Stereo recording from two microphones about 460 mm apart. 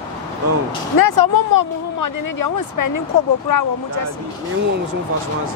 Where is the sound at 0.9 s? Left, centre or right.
Left.